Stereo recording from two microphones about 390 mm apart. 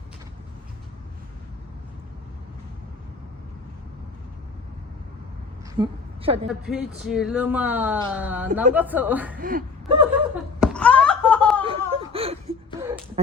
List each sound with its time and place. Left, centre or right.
5.7 s a woman's voice: centre
6.5 s speech: centre
9.4 s speech: right
10.6 s a sound: centre
11.6 s whimper: centre